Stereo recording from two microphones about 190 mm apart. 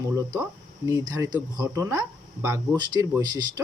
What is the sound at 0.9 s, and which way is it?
Speech, 20° right (ahead or behind).